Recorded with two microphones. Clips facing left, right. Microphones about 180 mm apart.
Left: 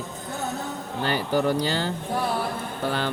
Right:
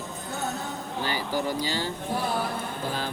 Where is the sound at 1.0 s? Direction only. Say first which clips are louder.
Left 6 dB; 60° left (ahead or behind).